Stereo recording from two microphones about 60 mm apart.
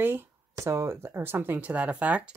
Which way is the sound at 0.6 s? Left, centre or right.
Right.